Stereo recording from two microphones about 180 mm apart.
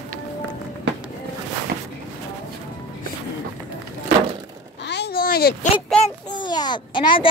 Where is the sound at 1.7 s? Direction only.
50° right (ahead or behind).